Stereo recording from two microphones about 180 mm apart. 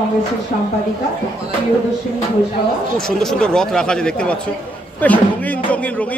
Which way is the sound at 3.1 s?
5° left (ahead or behind).